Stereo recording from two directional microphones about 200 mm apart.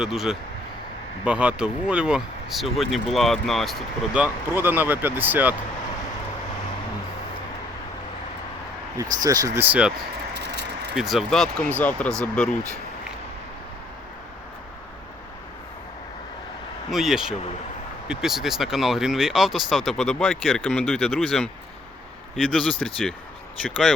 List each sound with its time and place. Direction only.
0.0 s speech: centre (ahead or behind)
9.2 s speech: 20° right (ahead or behind)
10.3 s vehicle: 55° right (ahead or behind)
10.9 s speech: centre (ahead or behind)
16.9 s speech: centre (ahead or behind)